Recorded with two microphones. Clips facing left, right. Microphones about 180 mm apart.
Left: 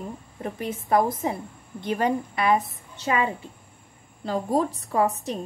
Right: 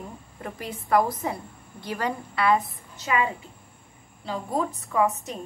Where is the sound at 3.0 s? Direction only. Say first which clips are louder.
Left 1 dB; 30° left (ahead or behind).